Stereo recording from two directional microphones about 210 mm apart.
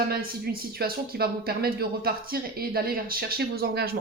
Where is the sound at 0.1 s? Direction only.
45° right (ahead or behind).